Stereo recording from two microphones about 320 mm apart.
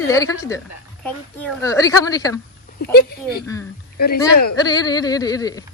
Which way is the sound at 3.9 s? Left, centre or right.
Left.